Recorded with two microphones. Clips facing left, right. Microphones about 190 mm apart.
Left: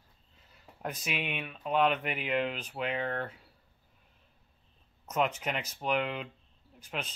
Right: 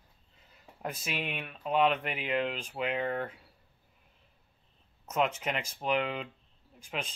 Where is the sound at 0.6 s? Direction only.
5° right (ahead or behind).